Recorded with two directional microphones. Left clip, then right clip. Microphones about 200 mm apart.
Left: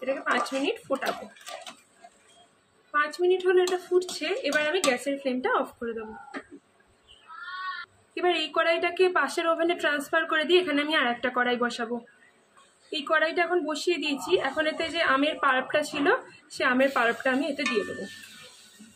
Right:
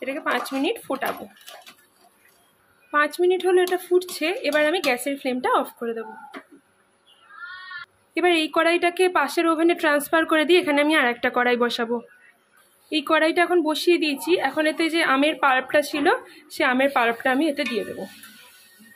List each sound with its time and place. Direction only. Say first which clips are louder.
0.0 s speech: right 1 dB; 55° right (ahead or behind)
2.9 s a woman's voice: right 4 dB; 50° right (ahead or behind)
8.1 s a woman's voice: right 6 dB; 50° right (ahead or behind)
13.1 s a woman's voice: right 5 dB; 50° right (ahead or behind)